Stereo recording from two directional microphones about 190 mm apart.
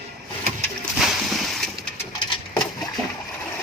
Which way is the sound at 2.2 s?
25° left (ahead or behind).